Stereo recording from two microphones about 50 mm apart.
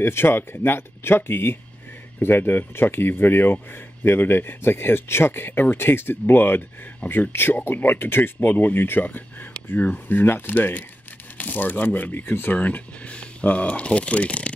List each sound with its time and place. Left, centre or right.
0.0 s speech: left